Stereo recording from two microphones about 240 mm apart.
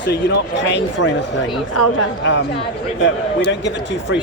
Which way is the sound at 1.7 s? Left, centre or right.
Left.